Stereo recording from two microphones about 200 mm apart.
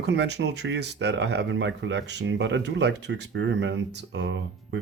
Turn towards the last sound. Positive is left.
turn(degrees=-60)  # may be behind; listen again after turning